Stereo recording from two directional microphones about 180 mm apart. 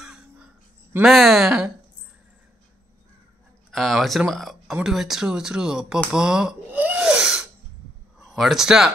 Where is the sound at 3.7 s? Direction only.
Centre (ahead or behind).